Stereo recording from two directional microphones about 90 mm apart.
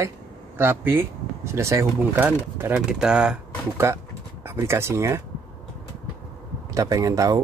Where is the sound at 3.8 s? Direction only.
30° right (ahead or behind).